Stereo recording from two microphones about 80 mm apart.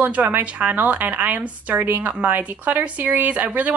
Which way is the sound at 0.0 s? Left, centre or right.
Right.